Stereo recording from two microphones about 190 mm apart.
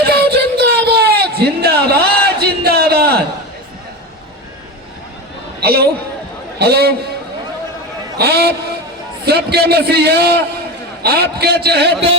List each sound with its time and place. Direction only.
0.0 s a sound: 55° right (ahead or behind)
5.5 s a woman's voice: 55° right (ahead or behind)
8.2 s a man's voice: 55° right (ahead or behind)